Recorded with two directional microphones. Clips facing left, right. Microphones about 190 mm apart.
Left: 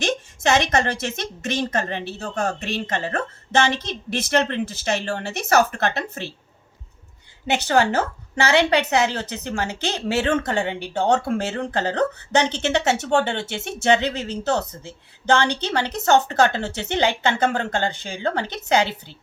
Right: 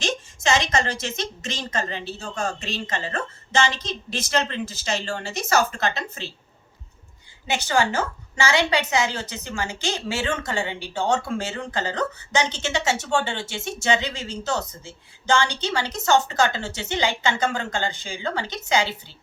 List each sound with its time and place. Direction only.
0.0 s a woman's voice: 60° left (ahead or behind)
7.4 s a woman's voice: 60° left (ahead or behind)